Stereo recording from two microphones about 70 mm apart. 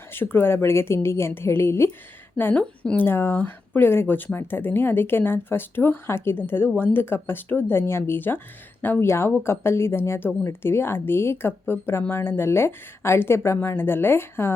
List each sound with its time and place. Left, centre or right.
0.1 s speech: left
2.4 s speech: left